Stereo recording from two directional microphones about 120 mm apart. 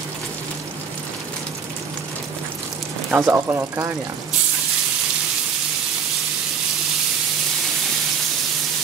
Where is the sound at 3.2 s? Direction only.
20° right (ahead or behind).